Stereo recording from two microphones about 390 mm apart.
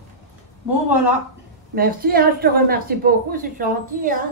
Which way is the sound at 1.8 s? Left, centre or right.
Right.